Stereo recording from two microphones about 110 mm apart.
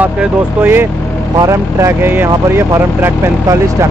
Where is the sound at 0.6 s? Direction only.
20° right (ahead or behind).